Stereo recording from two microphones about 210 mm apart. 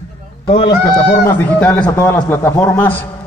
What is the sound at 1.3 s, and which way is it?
A man's voice, 10° left (ahead or behind).